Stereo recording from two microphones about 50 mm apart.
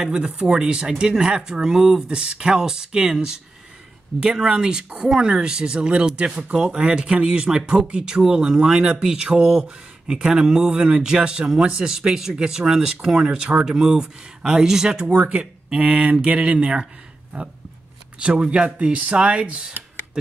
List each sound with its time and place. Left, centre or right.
0.0 s speech: centre
4.4 s speech: centre
18.2 s speech: centre